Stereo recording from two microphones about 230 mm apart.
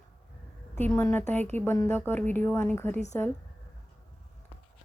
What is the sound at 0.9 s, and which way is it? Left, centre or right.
Speech, centre.